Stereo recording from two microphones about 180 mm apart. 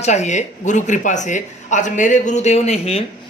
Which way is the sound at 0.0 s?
40° left (ahead or behind).